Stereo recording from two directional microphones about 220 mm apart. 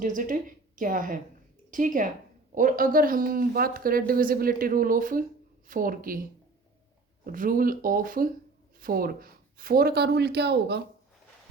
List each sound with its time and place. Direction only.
0.0 s a woman's voice: 40° right (ahead or behind)
7.3 s speech: 40° right (ahead or behind)